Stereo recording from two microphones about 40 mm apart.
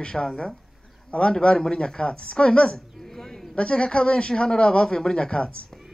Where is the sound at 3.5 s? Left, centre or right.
Left.